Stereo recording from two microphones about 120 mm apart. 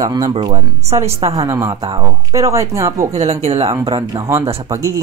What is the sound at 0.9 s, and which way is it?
Speech, 25° right (ahead or behind).